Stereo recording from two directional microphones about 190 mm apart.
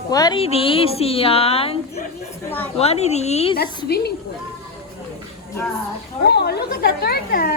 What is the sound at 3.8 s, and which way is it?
Speech, 55° left (ahead or behind).